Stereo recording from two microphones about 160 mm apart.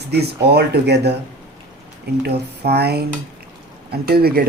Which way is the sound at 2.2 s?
90° right.